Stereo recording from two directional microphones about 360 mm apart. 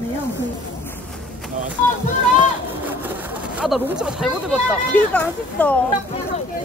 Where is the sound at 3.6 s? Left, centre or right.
Centre.